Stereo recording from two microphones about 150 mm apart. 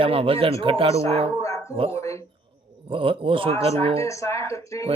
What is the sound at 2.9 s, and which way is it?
Speech, 35° right (ahead or behind).